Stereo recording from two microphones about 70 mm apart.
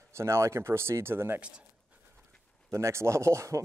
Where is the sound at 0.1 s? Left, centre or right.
Right.